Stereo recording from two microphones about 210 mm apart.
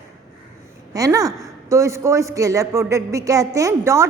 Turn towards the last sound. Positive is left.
turn(degrees=-15)  # may be behind; listen again after turning